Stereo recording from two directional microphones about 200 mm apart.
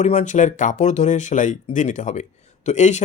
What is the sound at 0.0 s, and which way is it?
Speech, 35° left (ahead or behind).